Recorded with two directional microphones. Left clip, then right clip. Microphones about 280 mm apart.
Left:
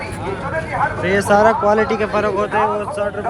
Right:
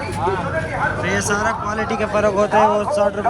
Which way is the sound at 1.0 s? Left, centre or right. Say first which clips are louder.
Left 10 dB; centre.